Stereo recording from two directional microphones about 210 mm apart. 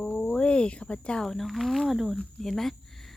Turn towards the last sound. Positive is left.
turn(degrees=0)  # may be behind; listen again after turning